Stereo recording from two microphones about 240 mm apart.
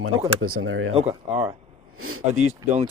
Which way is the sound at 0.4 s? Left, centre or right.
Right.